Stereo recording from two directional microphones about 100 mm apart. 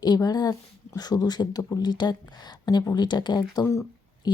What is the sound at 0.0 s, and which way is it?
Speech, 40° left (ahead or behind).